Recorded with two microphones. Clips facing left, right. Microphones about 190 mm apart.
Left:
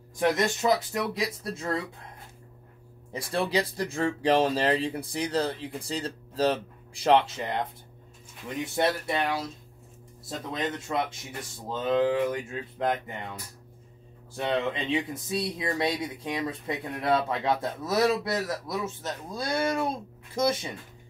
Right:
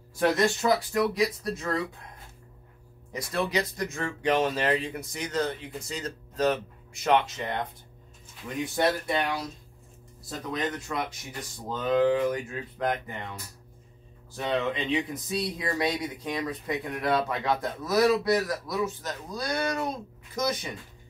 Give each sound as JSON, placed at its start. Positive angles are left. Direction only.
{"t": 0.2, "sound": "speech", "side_deg": 20}
{"t": 3.1, "sound": "speech", "side_deg": 30}
{"t": 8.7, "sound": "speech", "side_deg": 25}
{"t": 10.5, "sound": "speech", "side_deg": 25}
{"t": 14.3, "sound": "speech", "side_deg": 25}